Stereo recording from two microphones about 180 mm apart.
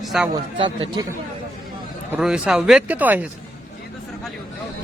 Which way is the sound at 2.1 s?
5° right (ahead or behind).